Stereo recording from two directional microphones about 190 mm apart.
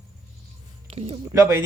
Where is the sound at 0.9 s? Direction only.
30° right (ahead or behind).